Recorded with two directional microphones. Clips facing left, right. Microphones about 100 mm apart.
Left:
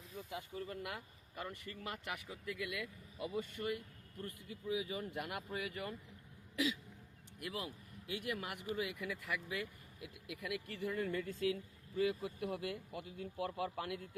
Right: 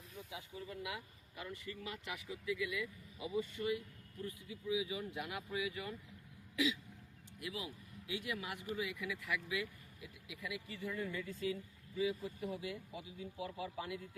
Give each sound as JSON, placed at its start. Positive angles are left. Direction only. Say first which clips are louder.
{"t": 0.3, "sound": "speech", "louder": "left 4 dB", "side_deg": 55}
{"t": 7.3, "sound": "a man's voice", "louder": "left 1 dB", "side_deg": 50}